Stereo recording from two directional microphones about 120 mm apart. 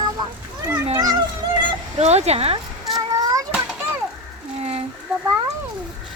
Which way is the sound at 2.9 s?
30° right (ahead or behind).